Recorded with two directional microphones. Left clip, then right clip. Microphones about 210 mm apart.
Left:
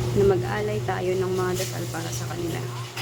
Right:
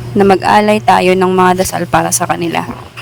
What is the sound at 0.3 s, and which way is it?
Speech, 55° right (ahead or behind).